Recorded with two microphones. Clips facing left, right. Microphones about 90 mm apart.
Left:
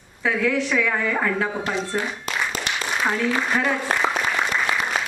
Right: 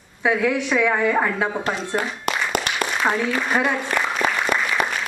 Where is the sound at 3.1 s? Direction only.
20° right (ahead or behind).